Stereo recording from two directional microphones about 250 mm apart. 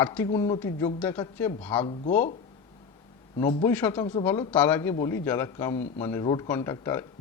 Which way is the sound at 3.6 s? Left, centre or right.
Centre.